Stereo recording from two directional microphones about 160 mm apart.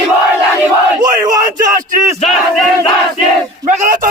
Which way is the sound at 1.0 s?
25° right (ahead or behind).